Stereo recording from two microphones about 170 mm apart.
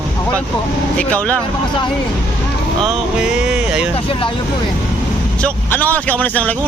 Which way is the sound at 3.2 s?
5° right (ahead or behind).